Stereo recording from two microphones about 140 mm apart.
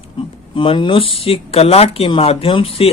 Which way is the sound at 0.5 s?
35° left (ahead or behind).